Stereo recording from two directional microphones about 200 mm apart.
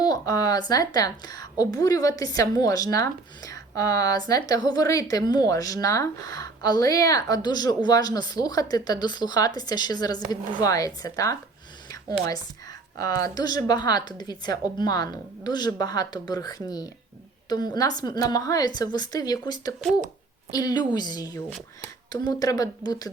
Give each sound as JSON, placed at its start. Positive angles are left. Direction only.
{"t": 0.0, "sound": "a woman's voice", "side_deg": 20}
{"t": 13.0, "sound": "a woman's voice", "side_deg": 15}